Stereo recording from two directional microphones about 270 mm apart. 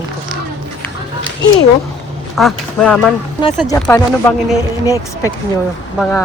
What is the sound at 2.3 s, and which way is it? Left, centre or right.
Speech, centre.